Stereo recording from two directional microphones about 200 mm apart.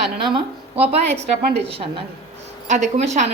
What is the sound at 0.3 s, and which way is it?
A woman's voice, 30° right (ahead or behind).